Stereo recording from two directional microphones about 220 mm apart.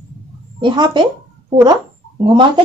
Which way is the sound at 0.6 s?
20° right (ahead or behind).